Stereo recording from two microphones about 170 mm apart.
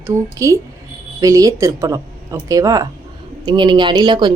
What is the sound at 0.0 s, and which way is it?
A woman's voice, 20° right (ahead or behind).